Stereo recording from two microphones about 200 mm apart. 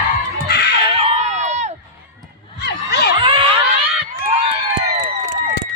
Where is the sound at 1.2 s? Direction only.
35° right (ahead or behind).